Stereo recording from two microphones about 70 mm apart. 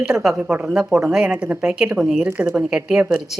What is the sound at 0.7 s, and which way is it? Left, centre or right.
Speech, centre.